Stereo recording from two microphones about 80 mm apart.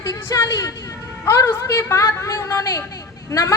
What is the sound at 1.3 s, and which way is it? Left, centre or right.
A woman's voice, left.